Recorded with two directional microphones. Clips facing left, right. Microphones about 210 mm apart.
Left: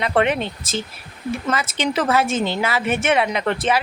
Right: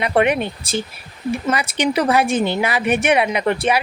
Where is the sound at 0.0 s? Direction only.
15° right (ahead or behind).